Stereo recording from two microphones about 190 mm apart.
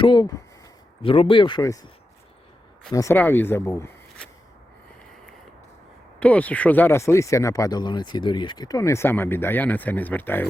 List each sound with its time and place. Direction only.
0.0 s speech: 20° left (ahead or behind)
2.9 s speech: 15° left (ahead or behind)
6.1 s speech: 5° left (ahead or behind)